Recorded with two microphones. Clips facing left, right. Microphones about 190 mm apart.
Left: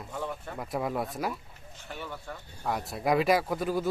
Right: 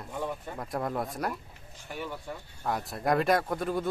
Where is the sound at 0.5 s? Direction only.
Centre (ahead or behind).